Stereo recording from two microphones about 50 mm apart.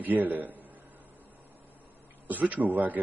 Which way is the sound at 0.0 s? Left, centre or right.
Right.